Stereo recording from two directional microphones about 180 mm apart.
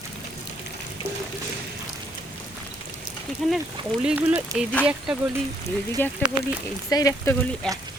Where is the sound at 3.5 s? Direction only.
5° right (ahead or behind).